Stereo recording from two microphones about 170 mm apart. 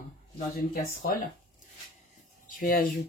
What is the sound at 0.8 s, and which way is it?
Speech, 60° left (ahead or behind).